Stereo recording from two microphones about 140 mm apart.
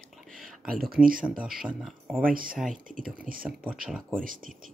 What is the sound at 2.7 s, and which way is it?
Speech, 70° right (ahead or behind).